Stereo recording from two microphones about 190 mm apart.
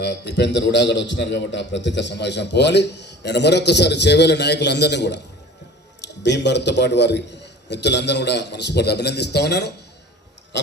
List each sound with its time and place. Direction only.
0.0 s a man's voice: 65° left (ahead or behind)
6.2 s a man's voice: 65° left (ahead or behind)
10.5 s a sound: 65° left (ahead or behind)